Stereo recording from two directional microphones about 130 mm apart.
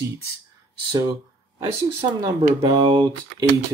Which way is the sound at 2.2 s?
40° right (ahead or behind).